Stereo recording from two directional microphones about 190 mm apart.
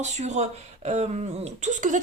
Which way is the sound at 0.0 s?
35° right (ahead or behind).